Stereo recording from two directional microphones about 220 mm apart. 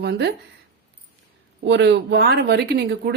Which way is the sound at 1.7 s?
55° right (ahead or behind).